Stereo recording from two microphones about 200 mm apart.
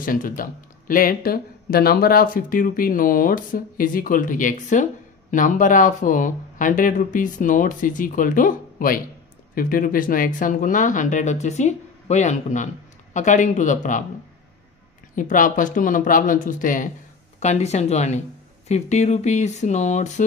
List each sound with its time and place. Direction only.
0.0 s speech: 45° left (ahead or behind)
15.1 s speech: 40° left (ahead or behind)